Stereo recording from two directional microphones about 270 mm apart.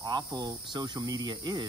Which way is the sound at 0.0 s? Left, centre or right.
Centre.